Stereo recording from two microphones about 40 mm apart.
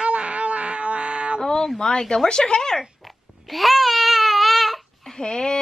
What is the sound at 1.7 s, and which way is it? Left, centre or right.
Speech, centre.